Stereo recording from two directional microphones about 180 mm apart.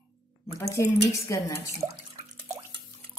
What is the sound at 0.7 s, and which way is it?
Speech, 15° left (ahead or behind).